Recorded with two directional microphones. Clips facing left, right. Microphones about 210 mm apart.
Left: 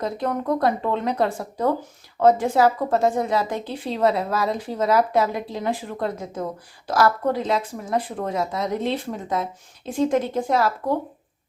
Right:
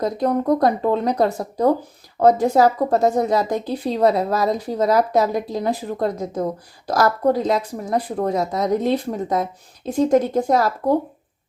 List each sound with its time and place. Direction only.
0.0 s a woman's voice: 35° right (ahead or behind)